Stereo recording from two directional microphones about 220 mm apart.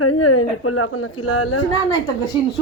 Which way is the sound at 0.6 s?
75° left (ahead or behind).